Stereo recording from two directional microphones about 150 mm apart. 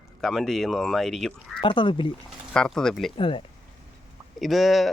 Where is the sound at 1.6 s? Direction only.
35° left (ahead or behind).